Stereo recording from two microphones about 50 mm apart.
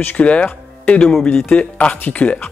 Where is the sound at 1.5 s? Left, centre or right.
Left.